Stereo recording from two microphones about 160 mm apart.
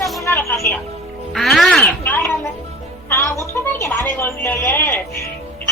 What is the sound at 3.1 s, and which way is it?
A woman's voice, 20° left (ahead or behind).